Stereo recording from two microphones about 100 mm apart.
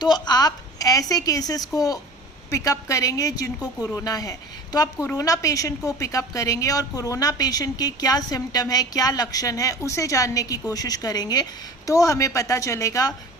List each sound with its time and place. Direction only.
0.0 s a woman's voice: 45° left (ahead or behind)